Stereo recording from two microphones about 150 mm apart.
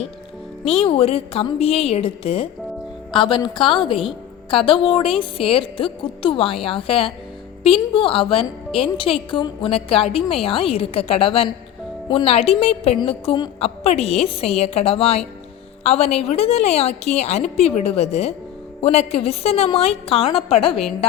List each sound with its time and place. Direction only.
0.6 s a woman's voice: 40° left (ahead or behind)